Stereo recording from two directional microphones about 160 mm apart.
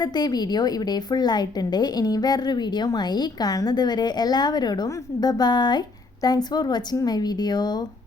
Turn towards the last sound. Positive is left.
turn(degrees=25)  # may be behind; listen again after turning